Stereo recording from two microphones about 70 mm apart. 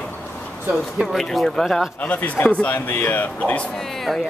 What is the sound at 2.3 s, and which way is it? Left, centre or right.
A man's voice, left.